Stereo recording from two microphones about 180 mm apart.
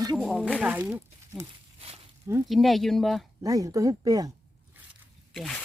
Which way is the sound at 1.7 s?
35° right (ahead or behind).